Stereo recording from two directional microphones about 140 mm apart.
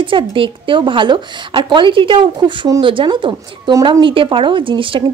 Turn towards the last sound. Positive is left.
turn(degrees=-40)  # may be behind; listen again after turning